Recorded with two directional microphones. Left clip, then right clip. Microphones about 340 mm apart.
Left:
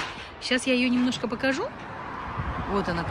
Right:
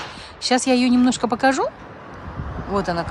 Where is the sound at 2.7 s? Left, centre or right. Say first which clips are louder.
Right 7 dB; centre.